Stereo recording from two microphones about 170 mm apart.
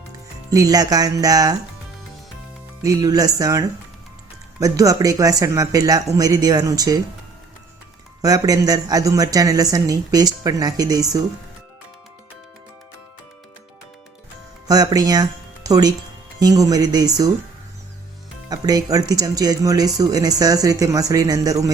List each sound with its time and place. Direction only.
0.5 s speech: 20° right (ahead or behind)
2.8 s speech: 20° right (ahead or behind)
8.2 s speech: 20° right (ahead or behind)
14.7 s speech: 20° right (ahead or behind)
18.4 s speech: 20° right (ahead or behind)